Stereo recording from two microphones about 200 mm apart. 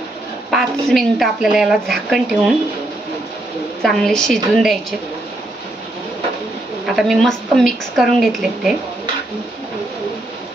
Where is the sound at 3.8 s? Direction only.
Centre (ahead or behind).